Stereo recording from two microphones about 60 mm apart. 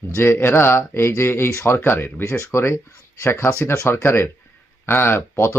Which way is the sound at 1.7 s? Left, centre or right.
Left.